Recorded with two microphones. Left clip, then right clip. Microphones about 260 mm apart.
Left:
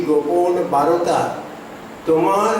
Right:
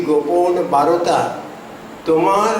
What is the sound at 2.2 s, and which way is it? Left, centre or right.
Mantra, centre.